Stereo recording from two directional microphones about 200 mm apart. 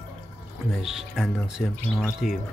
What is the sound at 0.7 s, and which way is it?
Speech, centre (ahead or behind).